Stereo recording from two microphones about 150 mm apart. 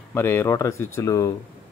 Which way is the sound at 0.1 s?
15° left (ahead or behind).